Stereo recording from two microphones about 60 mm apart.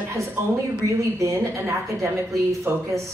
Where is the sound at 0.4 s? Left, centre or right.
Right.